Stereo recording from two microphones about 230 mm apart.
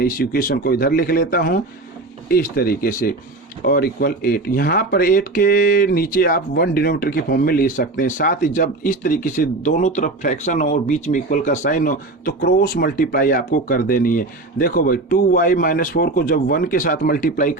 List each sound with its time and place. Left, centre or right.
0.0 s speech: left